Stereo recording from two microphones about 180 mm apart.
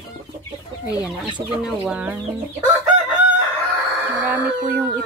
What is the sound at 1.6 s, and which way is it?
Speech, 5° right (ahead or behind).